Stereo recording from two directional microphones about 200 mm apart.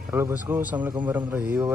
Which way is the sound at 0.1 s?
10° right (ahead or behind).